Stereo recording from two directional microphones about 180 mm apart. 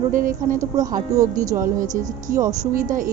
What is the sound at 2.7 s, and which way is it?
Speech, 50° right (ahead or behind).